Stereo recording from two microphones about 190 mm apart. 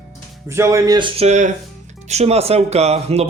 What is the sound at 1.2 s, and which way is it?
Speech, 35° right (ahead or behind).